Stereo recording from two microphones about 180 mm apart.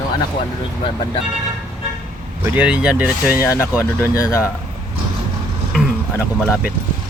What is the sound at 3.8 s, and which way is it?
Speech, 15° left (ahead or behind).